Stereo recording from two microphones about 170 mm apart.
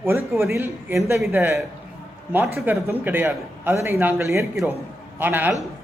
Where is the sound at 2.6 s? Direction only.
10° right (ahead or behind).